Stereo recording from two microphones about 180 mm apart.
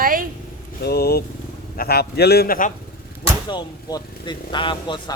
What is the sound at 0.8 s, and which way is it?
A man's voice, 60° left (ahead or behind).